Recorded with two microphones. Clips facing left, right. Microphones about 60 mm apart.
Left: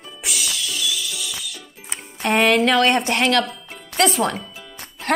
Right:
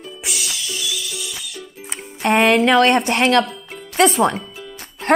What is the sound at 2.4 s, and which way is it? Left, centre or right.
A woman's voice, centre.